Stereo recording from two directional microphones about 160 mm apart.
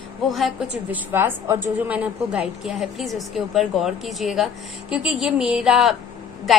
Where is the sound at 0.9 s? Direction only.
15° right (ahead or behind).